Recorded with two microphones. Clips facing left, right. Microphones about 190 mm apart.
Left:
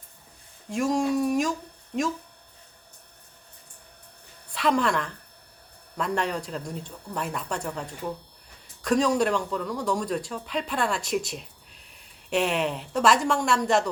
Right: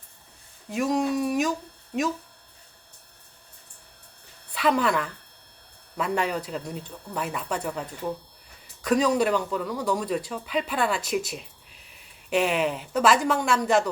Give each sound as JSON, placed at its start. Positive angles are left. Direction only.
{"t": 0.7, "sound": "speech", "side_deg": 0}
{"t": 4.5, "sound": "a woman's voice", "side_deg": 0}